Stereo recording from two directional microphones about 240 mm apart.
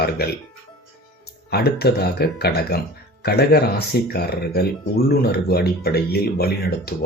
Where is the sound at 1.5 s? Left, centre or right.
Left.